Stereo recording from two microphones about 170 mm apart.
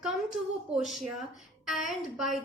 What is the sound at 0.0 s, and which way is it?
A woman's voice, 5° right (ahead or behind).